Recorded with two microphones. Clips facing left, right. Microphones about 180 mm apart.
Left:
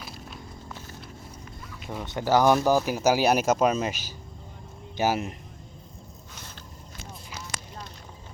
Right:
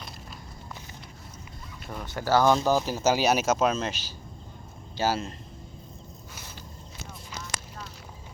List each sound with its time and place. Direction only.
1.8 s speech: 5° left (ahead or behind)
2.0 s speech: 20° left (ahead or behind)
4.9 s speech: 15° left (ahead or behind)